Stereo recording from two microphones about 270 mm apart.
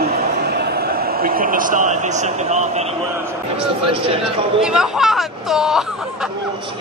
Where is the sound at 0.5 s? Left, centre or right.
Right.